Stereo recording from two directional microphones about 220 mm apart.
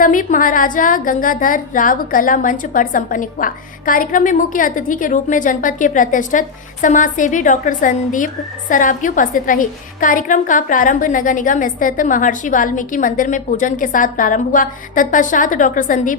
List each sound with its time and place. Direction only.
0.0 s a woman's voice: 35° left (ahead or behind)